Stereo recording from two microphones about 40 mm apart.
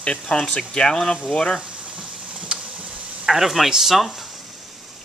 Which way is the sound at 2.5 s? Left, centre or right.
Right.